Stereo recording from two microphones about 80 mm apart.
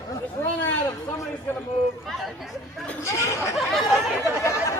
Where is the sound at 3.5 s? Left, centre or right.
Centre.